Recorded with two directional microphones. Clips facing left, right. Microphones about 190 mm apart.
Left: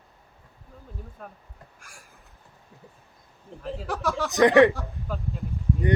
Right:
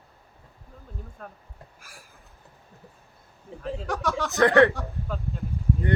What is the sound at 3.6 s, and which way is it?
Speech, centre (ahead or behind).